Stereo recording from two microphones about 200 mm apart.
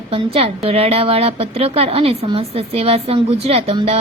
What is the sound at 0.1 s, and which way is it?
A woman's voice, 30° right (ahead or behind).